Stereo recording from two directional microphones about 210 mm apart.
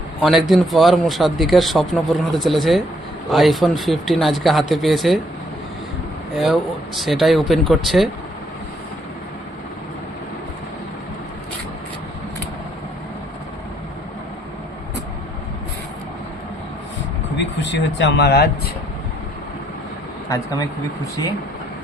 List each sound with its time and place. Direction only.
0.2 s a man's voice: centre (ahead or behind)
6.4 s a man's voice: centre (ahead or behind)
17.3 s a sound: 55° left (ahead or behind)
20.3 s speech: 15° left (ahead or behind)